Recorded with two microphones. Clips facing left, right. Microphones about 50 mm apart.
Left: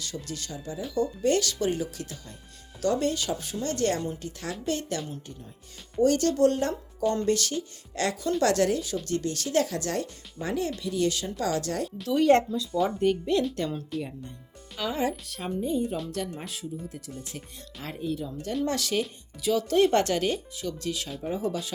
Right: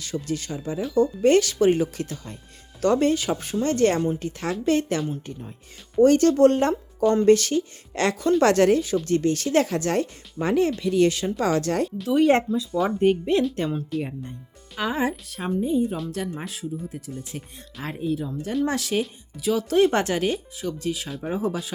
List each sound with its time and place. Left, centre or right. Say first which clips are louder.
0.0 s speech: right 8 dB; right
10.4 s speech: right 8 dB; right
12.0 s speech: right 1 dB; centre
13.0 s speech: right 7 dB; right
15.4 s speech: right 6 dB; centre
17.8 s speech: right 5 dB; centre